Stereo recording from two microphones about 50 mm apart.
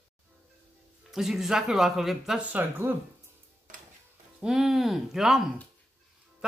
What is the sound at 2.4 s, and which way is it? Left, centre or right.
Speech, right.